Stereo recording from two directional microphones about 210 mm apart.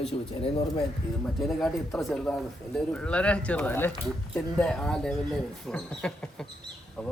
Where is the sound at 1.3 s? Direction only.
Centre (ahead or behind).